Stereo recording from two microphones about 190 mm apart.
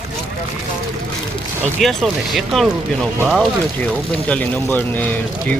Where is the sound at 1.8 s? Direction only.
Centre (ahead or behind).